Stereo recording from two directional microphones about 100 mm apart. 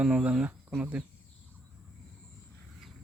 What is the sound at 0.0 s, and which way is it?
Speech, 10° right (ahead or behind).